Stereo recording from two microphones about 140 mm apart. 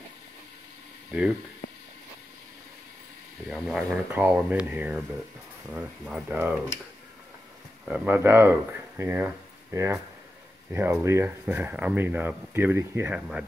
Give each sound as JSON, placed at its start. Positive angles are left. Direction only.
{"t": 3.4, "sound": "speech", "side_deg": -5}
{"t": 4.1, "sound": "speech", "side_deg": -10}
{"t": 7.9, "sound": "speech", "side_deg": -15}